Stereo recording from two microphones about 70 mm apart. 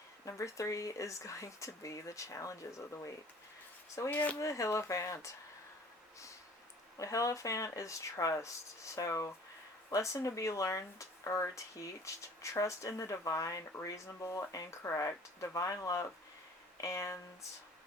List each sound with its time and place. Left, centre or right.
0.3 s speech: left
4.1 s speech: left
4.4 s speech: left
6.9 s speech: left